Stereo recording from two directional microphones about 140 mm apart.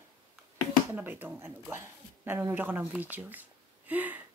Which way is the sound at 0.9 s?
15° right (ahead or behind).